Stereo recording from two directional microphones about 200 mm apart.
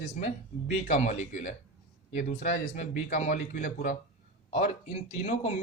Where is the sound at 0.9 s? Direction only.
35° left (ahead or behind).